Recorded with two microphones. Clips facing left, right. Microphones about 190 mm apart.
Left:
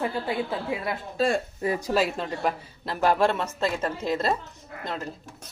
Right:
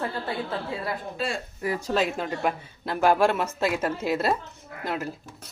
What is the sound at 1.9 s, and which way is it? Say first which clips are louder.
A woman's voice: right 2 dB; centre (ahead or behind).